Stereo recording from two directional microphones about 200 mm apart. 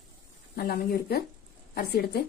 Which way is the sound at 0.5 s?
50° left (ahead or behind).